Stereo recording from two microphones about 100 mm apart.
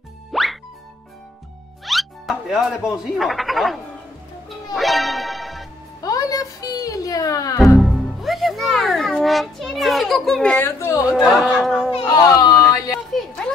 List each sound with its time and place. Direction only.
0.3 s music: centre (ahead or behind)
1.9 s speech: centre (ahead or behind)
4.7 s music: centre (ahead or behind)
6.0 s music: 35° left (ahead or behind)
7.8 s music: centre (ahead or behind)
10.6 s a woman's voice: 30° left (ahead or behind)
11.1 s speech: 5° right (ahead or behind)
11.5 s a sound: centre (ahead or behind)
12.1 s a sound: 35° left (ahead or behind)